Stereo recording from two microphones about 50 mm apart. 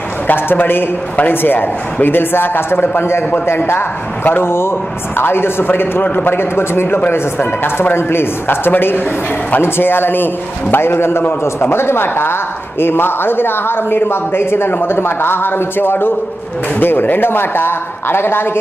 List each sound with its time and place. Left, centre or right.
0.3 s a woman's voice: left